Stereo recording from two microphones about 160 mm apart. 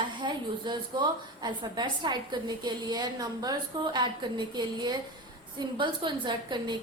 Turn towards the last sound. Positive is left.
turn(degrees=-30)  # may be behind; listen again after turning